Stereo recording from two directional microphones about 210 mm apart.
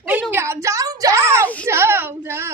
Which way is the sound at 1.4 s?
5° left (ahead or behind).